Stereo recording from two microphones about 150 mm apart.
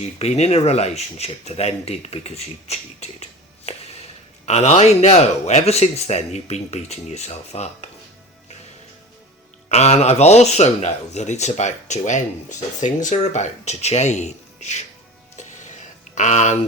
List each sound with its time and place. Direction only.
0.0 s speech: 45° left (ahead or behind)
9.6 s speech: 45° left (ahead or behind)
15.4 s music: 55° left (ahead or behind)
16.1 s speech: 50° left (ahead or behind)